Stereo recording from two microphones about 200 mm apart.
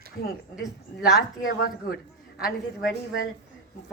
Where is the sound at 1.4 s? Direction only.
50° left (ahead or behind).